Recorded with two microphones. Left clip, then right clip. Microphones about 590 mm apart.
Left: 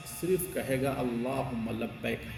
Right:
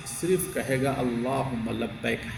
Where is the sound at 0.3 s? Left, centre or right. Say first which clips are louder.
Right 4 dB; left.